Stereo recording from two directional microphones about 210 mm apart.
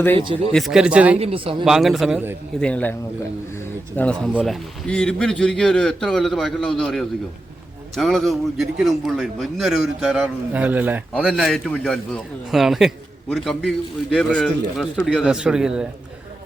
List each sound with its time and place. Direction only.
0.5 s a man's voice: centre (ahead or behind)
1.2 s speech: 25° right (ahead or behind)
1.6 s a man's voice: centre (ahead or behind)
3.9 s a man's voice: 5° left (ahead or behind)